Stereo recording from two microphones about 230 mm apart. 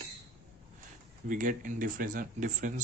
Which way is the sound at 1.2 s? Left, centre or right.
Right.